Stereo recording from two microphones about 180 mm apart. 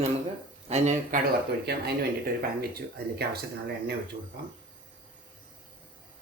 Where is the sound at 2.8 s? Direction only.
60° right (ahead or behind).